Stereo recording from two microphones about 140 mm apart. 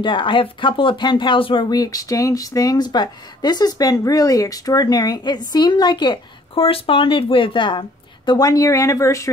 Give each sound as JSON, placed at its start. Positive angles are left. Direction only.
{"t": 0.0, "sound": "a woman's voice", "side_deg": 35}